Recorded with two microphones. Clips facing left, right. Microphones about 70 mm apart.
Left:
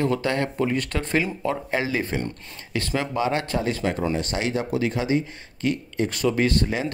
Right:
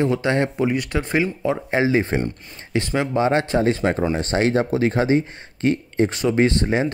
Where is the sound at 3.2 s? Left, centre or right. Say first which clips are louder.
Right 7 dB; right.